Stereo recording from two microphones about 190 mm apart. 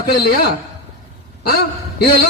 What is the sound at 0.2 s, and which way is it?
Speech, 55° left (ahead or behind).